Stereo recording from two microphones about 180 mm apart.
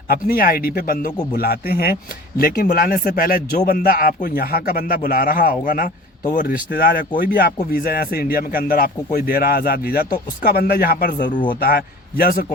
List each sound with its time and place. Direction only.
0.1 s a man's voice: 55° left (ahead or behind)
6.7 s speech: 60° left (ahead or behind)